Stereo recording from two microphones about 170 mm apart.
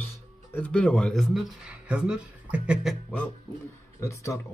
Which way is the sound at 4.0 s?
15° left (ahead or behind).